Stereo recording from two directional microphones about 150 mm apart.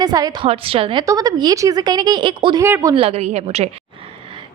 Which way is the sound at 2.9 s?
40° right (ahead or behind).